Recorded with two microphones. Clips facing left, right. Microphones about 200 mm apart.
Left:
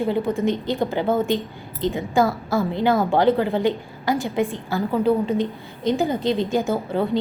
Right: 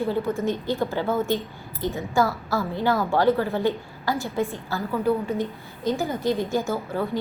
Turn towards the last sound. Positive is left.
turn(degrees=25)  # may be behind; listen again after turning